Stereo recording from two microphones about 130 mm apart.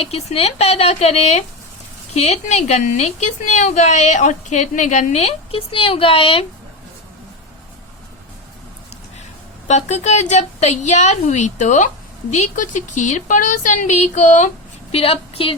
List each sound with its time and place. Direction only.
0.0 s a woman's voice: 55° left (ahead or behind)
9.6 s a woman's voice: 60° left (ahead or behind)
14.9 s a woman's voice: 50° left (ahead or behind)